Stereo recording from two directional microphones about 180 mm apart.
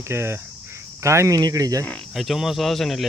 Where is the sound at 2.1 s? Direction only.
Centre (ahead or behind).